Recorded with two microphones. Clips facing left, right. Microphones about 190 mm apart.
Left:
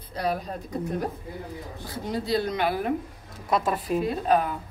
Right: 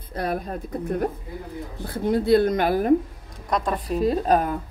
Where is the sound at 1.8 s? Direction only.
55° right (ahead or behind).